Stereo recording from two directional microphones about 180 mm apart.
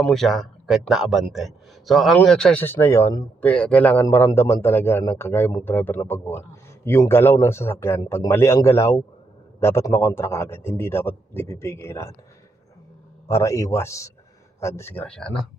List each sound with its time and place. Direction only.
0.0 s a man's voice: centre (ahead or behind)
13.2 s a man's voice: 15° left (ahead or behind)